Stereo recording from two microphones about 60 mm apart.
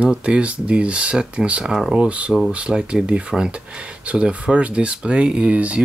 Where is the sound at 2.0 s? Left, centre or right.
Right.